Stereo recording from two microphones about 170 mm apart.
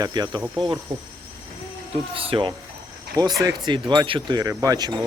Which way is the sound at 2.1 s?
35° right (ahead or behind).